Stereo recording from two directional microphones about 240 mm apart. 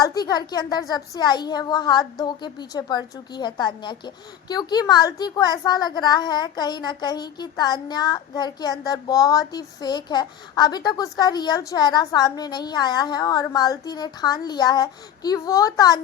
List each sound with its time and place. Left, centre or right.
0.0 s a child's voice: centre